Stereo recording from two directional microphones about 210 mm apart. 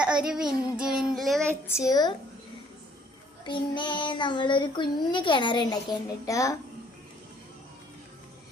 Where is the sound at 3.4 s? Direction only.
20° left (ahead or behind).